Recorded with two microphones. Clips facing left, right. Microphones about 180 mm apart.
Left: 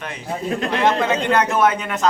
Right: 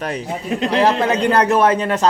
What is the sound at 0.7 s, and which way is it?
A man's voice, 35° right (ahead or behind).